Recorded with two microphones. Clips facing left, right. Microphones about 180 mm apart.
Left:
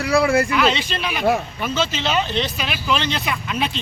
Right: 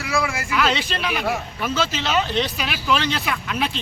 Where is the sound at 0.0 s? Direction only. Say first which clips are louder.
Left 6 dB; 35° left (ahead or behind).